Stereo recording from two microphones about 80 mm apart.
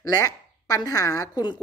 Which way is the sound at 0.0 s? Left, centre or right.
Left.